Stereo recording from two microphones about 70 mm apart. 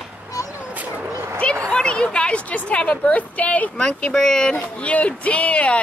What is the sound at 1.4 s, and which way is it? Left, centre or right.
A woman's voice, centre.